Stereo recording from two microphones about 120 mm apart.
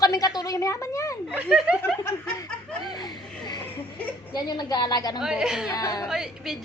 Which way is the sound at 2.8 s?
35° left (ahead or behind).